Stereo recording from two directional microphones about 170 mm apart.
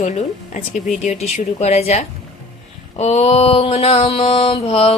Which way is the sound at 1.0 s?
40° left (ahead or behind).